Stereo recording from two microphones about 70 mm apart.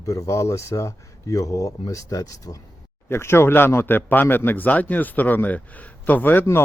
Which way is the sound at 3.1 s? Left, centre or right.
Left.